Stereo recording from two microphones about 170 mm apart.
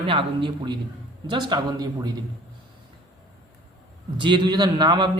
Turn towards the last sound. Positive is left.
turn(degrees=-25)  # may be behind; listen again after turning